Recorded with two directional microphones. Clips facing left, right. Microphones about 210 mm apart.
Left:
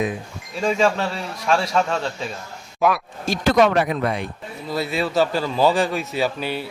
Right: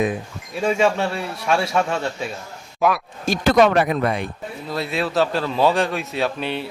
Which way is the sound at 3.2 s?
50° right (ahead or behind).